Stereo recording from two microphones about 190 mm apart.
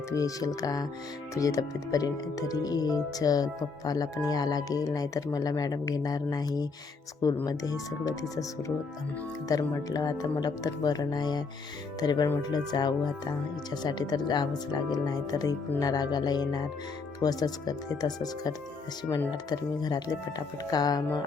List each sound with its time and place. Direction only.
0.1 s speech: 15° left (ahead or behind)